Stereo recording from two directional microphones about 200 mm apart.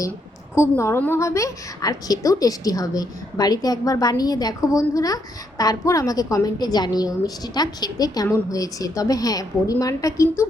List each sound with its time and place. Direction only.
0.5 s a woman's voice: 15° left (ahead or behind)